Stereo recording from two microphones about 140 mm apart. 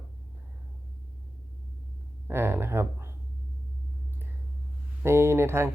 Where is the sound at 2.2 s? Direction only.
15° right (ahead or behind).